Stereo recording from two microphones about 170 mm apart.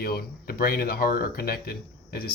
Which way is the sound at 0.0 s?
65° left (ahead or behind).